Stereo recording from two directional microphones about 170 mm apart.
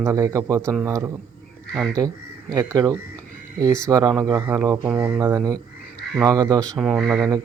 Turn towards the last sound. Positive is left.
turn(degrees=0)  # may be behind; listen again after turning